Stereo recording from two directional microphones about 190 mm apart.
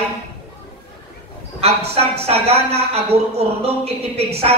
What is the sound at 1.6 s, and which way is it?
A man's voice, 30° right (ahead or behind).